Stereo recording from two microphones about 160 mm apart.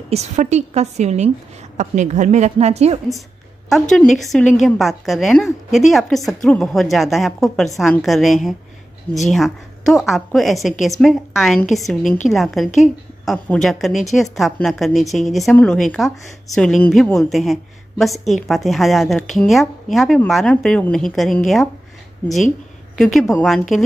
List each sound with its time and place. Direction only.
0.1 s a woman's voice: 45° right (ahead or behind)
3.2 s a sound: centre (ahead or behind)
3.9 s a woman's voice: centre (ahead or behind)
22.9 s a woman's voice: centre (ahead or behind)